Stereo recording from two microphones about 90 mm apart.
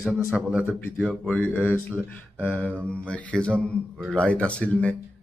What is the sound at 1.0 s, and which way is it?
Mantra, 10° left (ahead or behind).